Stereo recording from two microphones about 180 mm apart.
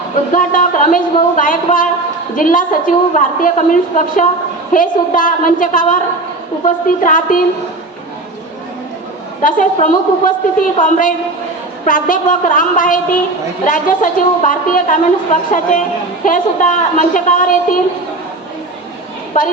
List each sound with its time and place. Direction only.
0.3 s a woman's voice: 45° left (ahead or behind)
9.4 s a woman's voice: 45° left (ahead or behind)